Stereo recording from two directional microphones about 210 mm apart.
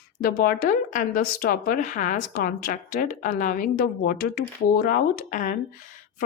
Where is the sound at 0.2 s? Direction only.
45° left (ahead or behind).